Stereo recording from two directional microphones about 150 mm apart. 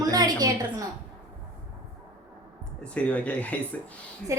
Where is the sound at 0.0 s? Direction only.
25° right (ahead or behind).